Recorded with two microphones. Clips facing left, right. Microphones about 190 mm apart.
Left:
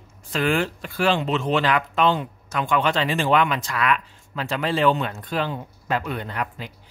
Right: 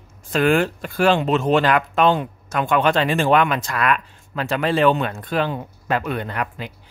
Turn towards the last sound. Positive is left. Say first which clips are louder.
# right 3 dB
turn(degrees=-65)  # may be behind; listen again after turning